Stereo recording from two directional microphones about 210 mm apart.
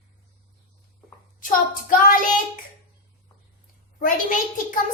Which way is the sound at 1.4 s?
40° left (ahead or behind).